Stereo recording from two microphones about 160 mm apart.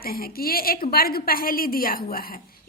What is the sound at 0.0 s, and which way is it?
A woman's voice, 70° left (ahead or behind).